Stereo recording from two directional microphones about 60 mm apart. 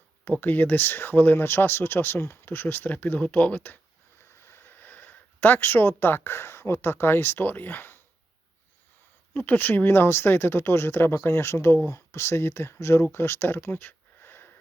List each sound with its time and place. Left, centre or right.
0.3 s speech: left
4.4 s speech: left
9.3 s speech: left